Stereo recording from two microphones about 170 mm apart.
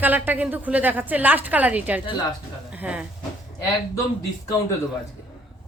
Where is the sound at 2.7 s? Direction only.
5° right (ahead or behind).